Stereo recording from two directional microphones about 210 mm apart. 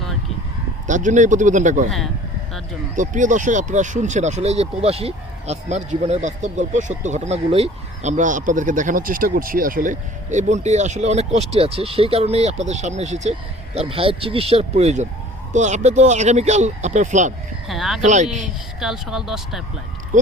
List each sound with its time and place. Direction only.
0.9 s speech: 35° right (ahead or behind)
2.9 s speech: 35° right (ahead or behind)
17.7 s speech: centre (ahead or behind)
18.0 s speech: 35° right (ahead or behind)
18.4 s speech: centre (ahead or behind)